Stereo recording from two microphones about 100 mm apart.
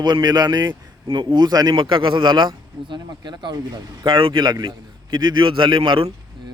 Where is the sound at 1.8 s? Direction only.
55° right (ahead or behind).